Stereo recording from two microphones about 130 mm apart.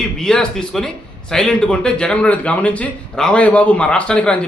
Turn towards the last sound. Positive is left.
turn(degrees=10)  # may be behind; listen again after turning